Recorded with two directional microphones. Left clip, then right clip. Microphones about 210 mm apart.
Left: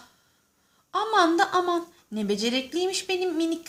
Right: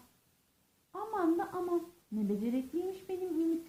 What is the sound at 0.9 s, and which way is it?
Speech, 30° left (ahead or behind).